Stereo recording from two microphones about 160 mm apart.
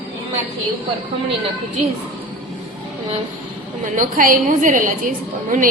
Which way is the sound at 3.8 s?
55° right (ahead or behind).